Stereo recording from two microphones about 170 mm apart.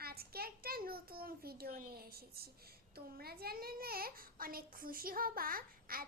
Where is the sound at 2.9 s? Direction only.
65° right (ahead or behind).